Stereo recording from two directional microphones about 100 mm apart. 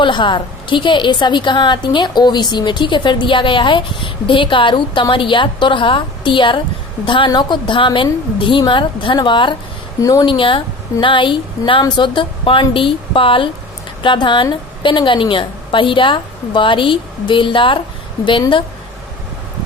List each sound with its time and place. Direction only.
0.0 s a woman's voice: 50° left (ahead or behind)
10.0 s a woman's voice: 35° left (ahead or behind)
10.2 s a woman's voice: 60° left (ahead or behind)